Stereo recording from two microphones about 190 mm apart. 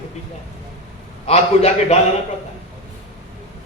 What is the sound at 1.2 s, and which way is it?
Speech, 35° left (ahead or behind).